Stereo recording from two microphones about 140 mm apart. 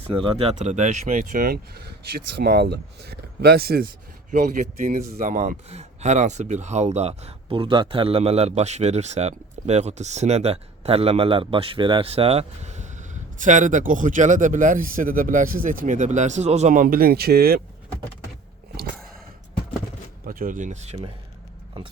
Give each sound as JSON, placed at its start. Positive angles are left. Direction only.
{"t": 0.0, "sound": "speech", "side_deg": -40}
{"t": 4.3, "sound": "speech", "side_deg": -70}
{"t": 20.2, "sound": "speech", "side_deg": -80}